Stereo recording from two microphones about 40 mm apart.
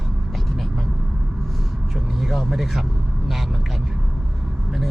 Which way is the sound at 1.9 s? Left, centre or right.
Centre.